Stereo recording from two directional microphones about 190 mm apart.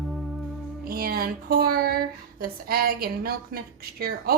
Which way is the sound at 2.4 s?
50° right (ahead or behind).